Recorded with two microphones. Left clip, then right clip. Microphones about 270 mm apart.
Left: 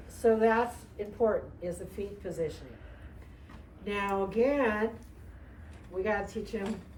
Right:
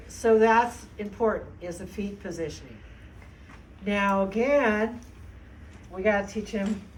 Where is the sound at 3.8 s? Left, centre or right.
Centre.